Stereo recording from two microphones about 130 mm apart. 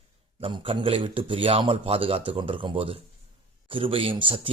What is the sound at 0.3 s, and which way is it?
A man's voice, 45° right (ahead or behind).